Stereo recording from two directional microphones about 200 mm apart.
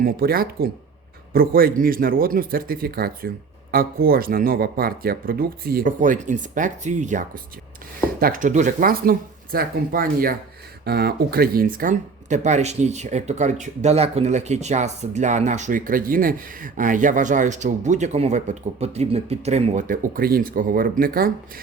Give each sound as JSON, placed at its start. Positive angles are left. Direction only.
{"t": 0.0, "sound": "a man's voice", "side_deg": -50}